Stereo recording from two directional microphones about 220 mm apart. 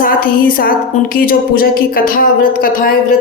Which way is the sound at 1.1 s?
40° left (ahead or behind).